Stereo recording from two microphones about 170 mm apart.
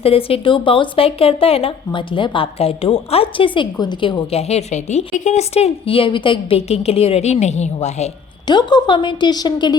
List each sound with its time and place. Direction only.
0.0 s speech: 35° left (ahead or behind)
8.4 s a woman's voice: 25° left (ahead or behind)